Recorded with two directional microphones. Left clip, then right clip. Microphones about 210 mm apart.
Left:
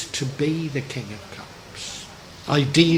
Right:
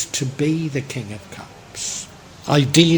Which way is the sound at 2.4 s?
40° right (ahead or behind).